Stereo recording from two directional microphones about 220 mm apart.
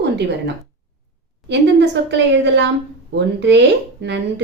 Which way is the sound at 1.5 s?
50° right (ahead or behind).